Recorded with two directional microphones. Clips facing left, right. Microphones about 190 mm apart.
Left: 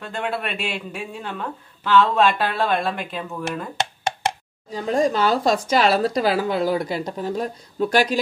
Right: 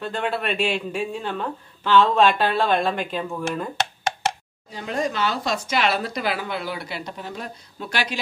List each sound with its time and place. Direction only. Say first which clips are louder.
0.1 s a woman's voice: left 1 dB; 10° left (ahead or behind)
4.7 s speech: left 6 dB; 35° left (ahead or behind)